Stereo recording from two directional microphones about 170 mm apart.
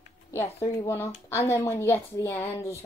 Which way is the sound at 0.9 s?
15° left (ahead or behind).